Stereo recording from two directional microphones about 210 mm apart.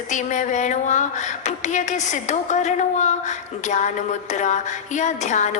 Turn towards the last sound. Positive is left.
turn(degrees=35)  # may be behind; listen again after turning